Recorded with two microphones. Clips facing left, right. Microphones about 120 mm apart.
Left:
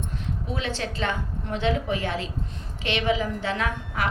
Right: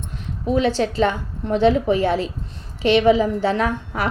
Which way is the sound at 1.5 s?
35° right (ahead or behind).